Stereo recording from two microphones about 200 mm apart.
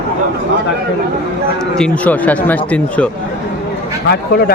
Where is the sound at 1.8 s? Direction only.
5° left (ahead or behind).